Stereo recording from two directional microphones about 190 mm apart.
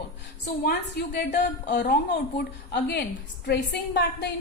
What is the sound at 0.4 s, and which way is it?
A woman's voice, 55° left (ahead or behind).